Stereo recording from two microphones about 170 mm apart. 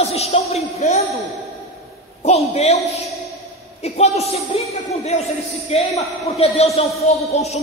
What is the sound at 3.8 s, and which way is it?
A man's voice, 40° left (ahead or behind).